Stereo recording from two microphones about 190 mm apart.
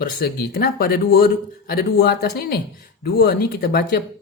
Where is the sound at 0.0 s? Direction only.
55° left (ahead or behind).